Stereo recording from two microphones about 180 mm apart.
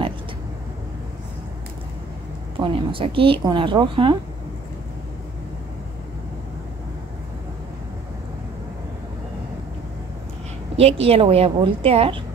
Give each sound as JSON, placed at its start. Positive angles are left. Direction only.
{"t": 2.6, "sound": "speech", "side_deg": -30}
{"t": 10.8, "sound": "a woman's voice", "side_deg": -35}